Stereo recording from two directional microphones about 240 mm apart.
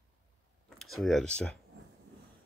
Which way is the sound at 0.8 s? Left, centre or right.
Centre.